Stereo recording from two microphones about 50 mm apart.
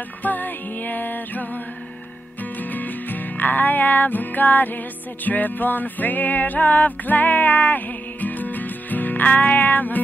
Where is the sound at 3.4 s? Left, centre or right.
Left.